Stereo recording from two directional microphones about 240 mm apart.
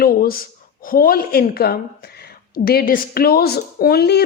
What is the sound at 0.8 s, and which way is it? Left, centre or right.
A woman's voice, left.